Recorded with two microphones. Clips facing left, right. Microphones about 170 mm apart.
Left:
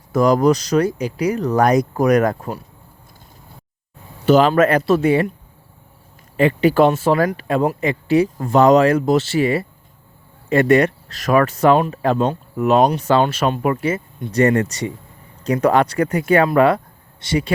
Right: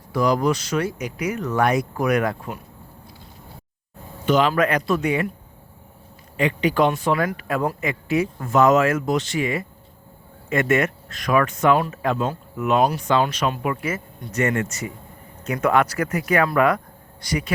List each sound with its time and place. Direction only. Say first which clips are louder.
0.1 s speech: left 6 dB; 45° left (ahead or behind)
4.3 s speech: left 6 dB; 40° left (ahead or behind)
6.3 s speech: left 6 dB; 40° left (ahead or behind)
7.3 s speech: left 5 dB; 25° left (ahead or behind)